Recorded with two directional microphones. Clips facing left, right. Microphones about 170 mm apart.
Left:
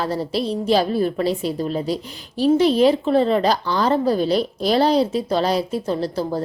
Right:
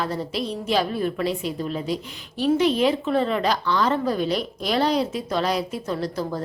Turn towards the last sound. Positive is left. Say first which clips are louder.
# left 4 dB
turn(degrees=30)  # may be behind; listen again after turning